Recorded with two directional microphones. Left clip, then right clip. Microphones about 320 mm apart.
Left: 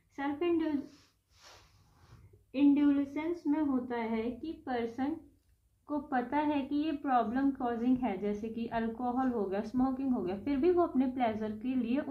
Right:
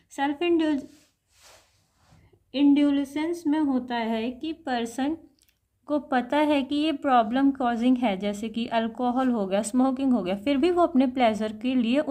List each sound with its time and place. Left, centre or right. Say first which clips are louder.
0.2 s speech: right 8 dB; right
2.7 s a woman's voice: right 6 dB; right